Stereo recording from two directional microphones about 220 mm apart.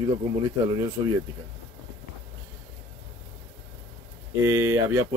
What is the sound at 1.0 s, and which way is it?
Speech, 15° right (ahead or behind).